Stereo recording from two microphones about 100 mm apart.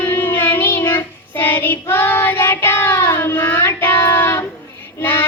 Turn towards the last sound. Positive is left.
turn(degrees=20)  # may be behind; listen again after turning